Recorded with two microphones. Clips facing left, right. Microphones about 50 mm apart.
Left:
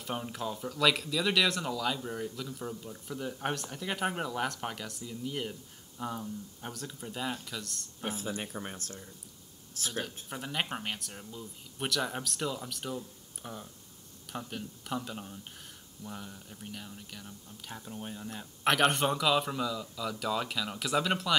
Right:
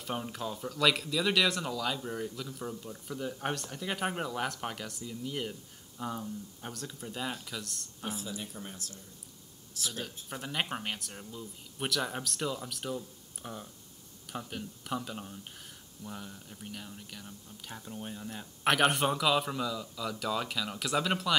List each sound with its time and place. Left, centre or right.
0.0 s speech: centre
8.0 s speech: left
10.3 s speech: centre